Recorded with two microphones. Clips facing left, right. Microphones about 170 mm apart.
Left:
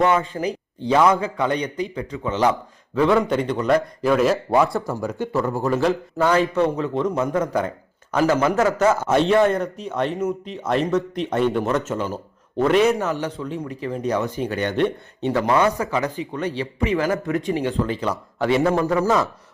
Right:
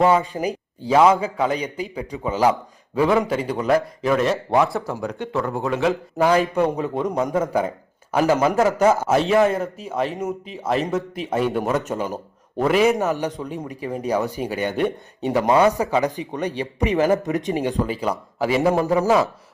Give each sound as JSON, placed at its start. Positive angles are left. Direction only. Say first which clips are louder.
{"t": 0.2, "sound": "a man's voice", "louder": "even", "side_deg": -10}
{"t": 6.1, "sound": "a man's voice", "louder": "right 1 dB", "side_deg": -15}